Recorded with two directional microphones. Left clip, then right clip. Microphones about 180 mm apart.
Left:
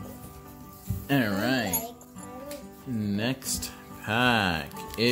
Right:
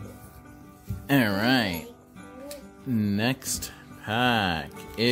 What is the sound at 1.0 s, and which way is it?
Speech, 30° right (ahead or behind).